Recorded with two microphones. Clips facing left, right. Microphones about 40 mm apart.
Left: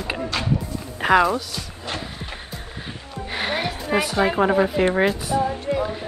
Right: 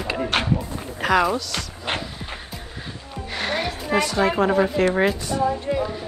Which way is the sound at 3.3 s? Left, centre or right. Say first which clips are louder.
Even; centre.